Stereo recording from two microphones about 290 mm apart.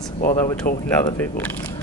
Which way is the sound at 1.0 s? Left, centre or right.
Centre.